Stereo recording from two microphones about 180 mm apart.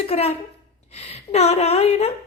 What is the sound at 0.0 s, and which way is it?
A child's voice, 35° left (ahead or behind).